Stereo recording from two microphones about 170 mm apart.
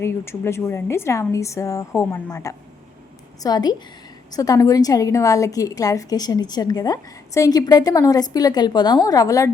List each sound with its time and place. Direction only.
0.0 s a woman's voice: 15° left (ahead or behind)